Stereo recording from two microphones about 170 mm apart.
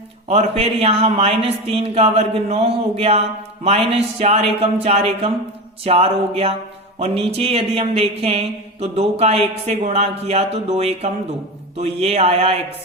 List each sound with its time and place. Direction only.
0.3 s speech: 35° right (ahead or behind)